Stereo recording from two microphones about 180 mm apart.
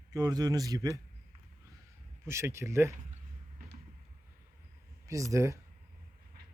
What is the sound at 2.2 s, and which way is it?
Speech, 15° right (ahead or behind).